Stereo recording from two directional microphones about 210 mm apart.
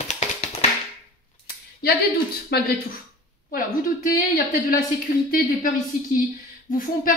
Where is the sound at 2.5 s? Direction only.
50° left (ahead or behind).